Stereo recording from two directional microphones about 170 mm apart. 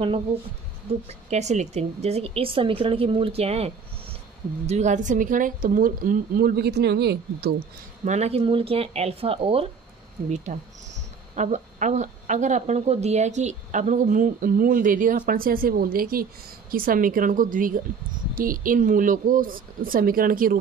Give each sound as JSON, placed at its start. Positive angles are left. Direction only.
{"t": 1.0, "sound": "speech", "side_deg": -40}
{"t": 8.0, "sound": "speech", "side_deg": -40}